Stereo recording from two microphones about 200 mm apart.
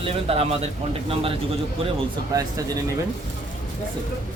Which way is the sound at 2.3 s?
15° right (ahead or behind).